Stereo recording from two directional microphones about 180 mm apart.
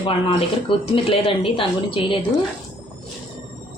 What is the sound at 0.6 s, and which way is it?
Speech, 30° left (ahead or behind).